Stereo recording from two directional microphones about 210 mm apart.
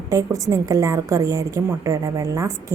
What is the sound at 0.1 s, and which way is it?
A woman's voice, 15° right (ahead or behind).